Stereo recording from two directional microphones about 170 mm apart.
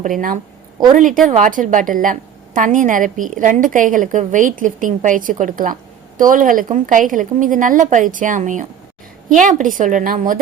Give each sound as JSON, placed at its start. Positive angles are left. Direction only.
{"t": 0.9, "sound": "a woman's voice", "side_deg": -50}